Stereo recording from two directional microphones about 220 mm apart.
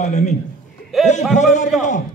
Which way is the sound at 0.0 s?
30° left (ahead or behind).